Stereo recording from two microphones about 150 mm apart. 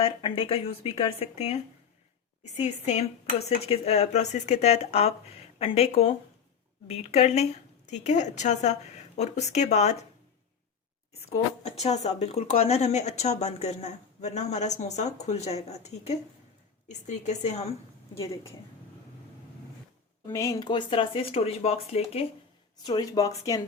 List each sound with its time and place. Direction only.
0.0 s a woman's voice: 35° left (ahead or behind)
11.3 s a woman's voice: 45° left (ahead or behind)
20.2 s speech: 20° left (ahead or behind); by 22.3 s 40° left (ahead or behind)
22.8 s speech: 25° left (ahead or behind)